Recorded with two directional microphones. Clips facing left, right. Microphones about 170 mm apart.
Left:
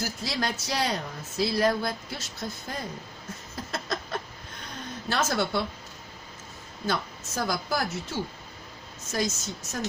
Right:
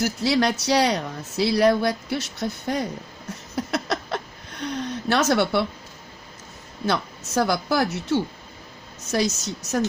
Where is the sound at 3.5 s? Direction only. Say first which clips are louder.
Right 8 dB; 75° right (ahead or behind).